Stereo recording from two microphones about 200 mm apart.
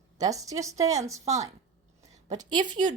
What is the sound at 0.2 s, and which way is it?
A woman's voice, 15° right (ahead or behind).